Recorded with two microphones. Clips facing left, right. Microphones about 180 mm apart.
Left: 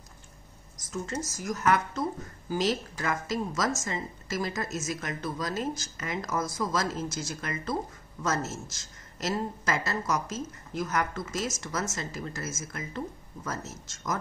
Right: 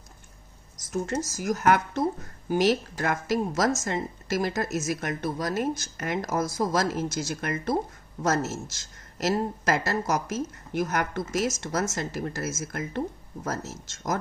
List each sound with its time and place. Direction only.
0.9 s speech: 65° right (ahead or behind)
9.7 s speech: 70° right (ahead or behind)